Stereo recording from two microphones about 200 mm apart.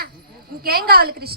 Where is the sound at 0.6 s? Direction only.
50° right (ahead or behind).